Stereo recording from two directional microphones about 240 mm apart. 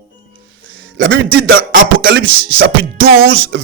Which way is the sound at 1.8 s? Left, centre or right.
Right.